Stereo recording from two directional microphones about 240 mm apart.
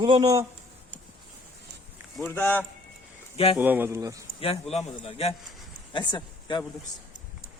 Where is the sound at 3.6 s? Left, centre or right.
Centre.